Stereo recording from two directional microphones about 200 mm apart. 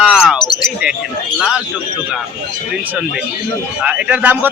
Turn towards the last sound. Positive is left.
turn(degrees=-10)  # may be behind; listen again after turning